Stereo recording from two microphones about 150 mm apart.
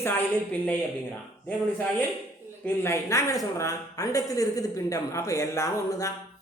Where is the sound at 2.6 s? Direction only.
15° left (ahead or behind).